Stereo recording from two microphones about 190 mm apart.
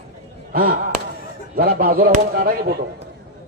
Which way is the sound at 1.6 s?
50° right (ahead or behind).